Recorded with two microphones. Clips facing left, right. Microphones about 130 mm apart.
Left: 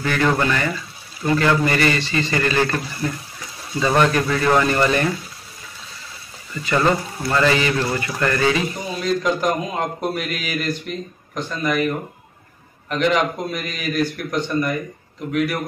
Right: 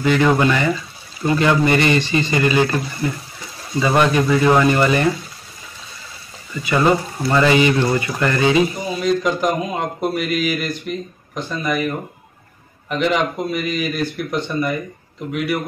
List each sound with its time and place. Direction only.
0.0 s a man's voice: 15° right (ahead or behind)
6.6 s speech: 10° right (ahead or behind)
7.8 s a man's voice: centre (ahead or behind)
8.4 s a man's voice: 20° right (ahead or behind)
9.0 s a man's voice: centre (ahead or behind)
12.9 s a man's voice: 5° right (ahead or behind)